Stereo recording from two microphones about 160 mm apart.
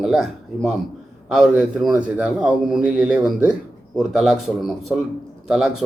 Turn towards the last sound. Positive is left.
turn(degrees=-5)  # may be behind; listen again after turning